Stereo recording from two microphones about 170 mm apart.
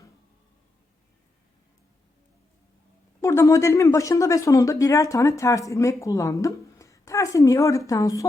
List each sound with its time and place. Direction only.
3.2 s speech: 15° left (ahead or behind)